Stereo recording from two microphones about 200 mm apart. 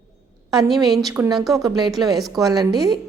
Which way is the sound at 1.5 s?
20° right (ahead or behind).